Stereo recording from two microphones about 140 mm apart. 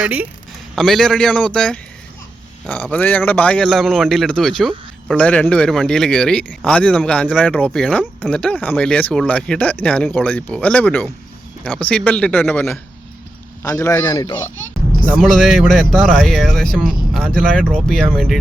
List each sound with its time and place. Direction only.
0.0 s speech: 10° right (ahead or behind)
0.8 s speech: centre (ahead or behind); by 14.3 s 30° left (ahead or behind)
15.2 s speech: centre (ahead or behind)